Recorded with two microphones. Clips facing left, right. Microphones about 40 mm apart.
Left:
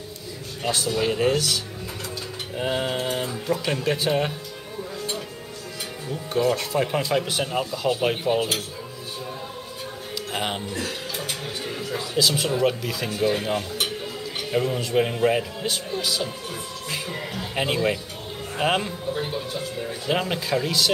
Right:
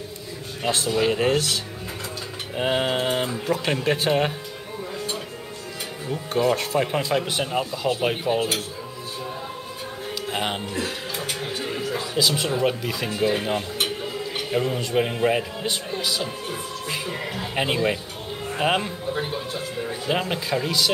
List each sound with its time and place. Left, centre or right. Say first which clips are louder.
0.7 s speech: right 2 dB; right
6.4 s speech: right 1 dB; right
6.8 s a man's voice: even; centre
10.3 s a man's voice: right 1 dB; centre
10.7 s music: right 1 dB; right
11.4 s a sound: right 3 dB; centre
12.6 s a man's voice: even; centre
16.9 s music: right 1 dB; centre
17.6 s a man's voice: even; centre
19.1 s speech: right 1 dB; centre
20.1 s speech: left 1 dB; centre